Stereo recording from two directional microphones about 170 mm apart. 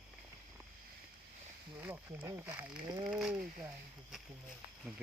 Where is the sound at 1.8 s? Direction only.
15° right (ahead or behind).